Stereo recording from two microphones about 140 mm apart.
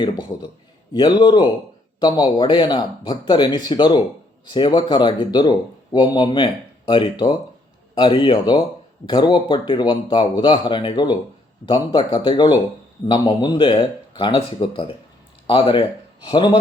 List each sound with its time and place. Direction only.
0.0 s speech: 30° left (ahead or behind)